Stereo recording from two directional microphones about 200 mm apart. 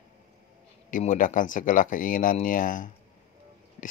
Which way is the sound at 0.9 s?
40° left (ahead or behind).